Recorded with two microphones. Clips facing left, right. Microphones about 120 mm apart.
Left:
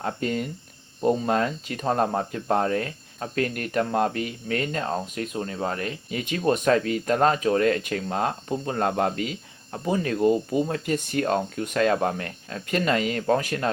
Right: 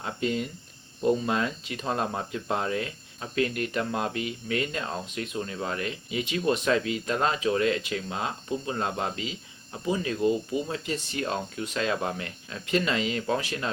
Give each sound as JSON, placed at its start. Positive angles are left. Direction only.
{"t": 0.0, "sound": "speech", "side_deg": 45}